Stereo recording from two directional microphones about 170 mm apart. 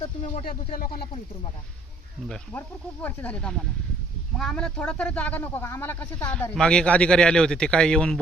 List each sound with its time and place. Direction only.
0.4 s speech: 60° left (ahead or behind)
2.2 s speech: 5° left (ahead or behind)